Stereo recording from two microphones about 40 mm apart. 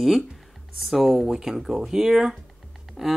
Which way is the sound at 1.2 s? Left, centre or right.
Centre.